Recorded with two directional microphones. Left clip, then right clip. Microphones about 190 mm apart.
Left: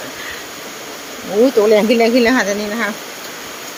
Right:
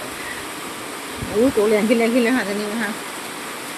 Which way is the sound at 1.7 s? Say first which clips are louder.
Left 5 dB; 25° left (ahead or behind).